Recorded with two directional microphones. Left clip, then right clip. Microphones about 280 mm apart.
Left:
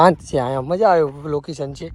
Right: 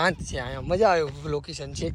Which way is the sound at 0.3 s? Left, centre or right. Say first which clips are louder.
Left 13 dB; centre.